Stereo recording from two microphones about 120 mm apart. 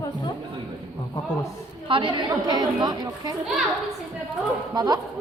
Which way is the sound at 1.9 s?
40° right (ahead or behind).